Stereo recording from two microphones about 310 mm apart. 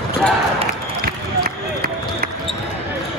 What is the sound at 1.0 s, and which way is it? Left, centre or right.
Run, right.